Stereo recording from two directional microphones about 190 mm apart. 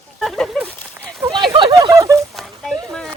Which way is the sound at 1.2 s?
25° right (ahead or behind).